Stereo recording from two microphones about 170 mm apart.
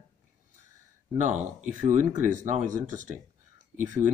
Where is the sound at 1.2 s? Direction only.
45° right (ahead or behind).